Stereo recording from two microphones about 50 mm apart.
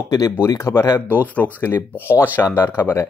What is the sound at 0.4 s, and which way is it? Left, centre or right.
Speech, left.